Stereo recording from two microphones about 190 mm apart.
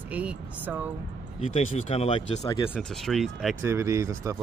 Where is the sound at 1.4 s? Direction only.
35° left (ahead or behind).